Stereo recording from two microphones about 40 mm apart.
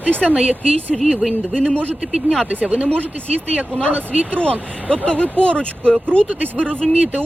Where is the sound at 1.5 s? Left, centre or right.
Left.